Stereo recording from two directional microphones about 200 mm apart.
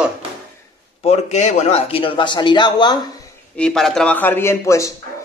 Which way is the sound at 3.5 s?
5° left (ahead or behind).